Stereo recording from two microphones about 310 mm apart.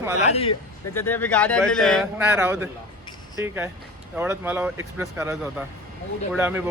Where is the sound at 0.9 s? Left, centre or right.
Centre.